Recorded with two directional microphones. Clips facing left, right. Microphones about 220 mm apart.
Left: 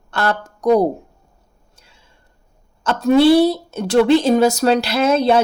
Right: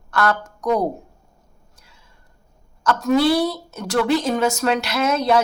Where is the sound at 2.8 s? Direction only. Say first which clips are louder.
Left 5 dB; 30° left (ahead or behind).